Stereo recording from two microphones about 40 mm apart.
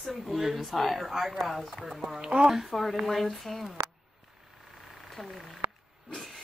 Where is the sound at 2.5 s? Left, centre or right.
Centre.